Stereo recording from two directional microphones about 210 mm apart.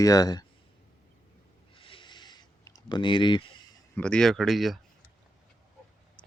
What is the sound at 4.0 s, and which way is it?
Speech, 5° left (ahead or behind).